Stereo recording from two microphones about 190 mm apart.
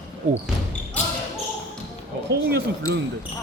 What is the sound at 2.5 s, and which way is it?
Speech, 65° right (ahead or behind).